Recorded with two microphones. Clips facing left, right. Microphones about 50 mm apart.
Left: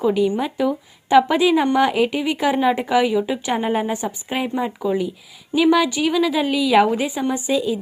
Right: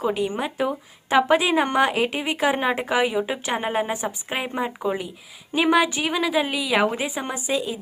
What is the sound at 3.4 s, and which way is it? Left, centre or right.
Speech, centre.